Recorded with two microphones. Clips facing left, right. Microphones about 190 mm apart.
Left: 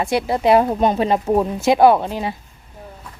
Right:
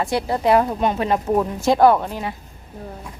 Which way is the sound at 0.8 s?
35° left (ahead or behind).